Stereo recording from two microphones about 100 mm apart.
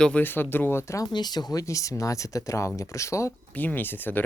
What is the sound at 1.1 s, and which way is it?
Speech, 45° left (ahead or behind).